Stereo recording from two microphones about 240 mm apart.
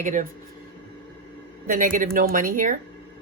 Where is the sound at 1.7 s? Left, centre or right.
Right.